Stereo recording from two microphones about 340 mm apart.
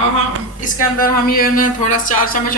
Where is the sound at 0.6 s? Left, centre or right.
Left.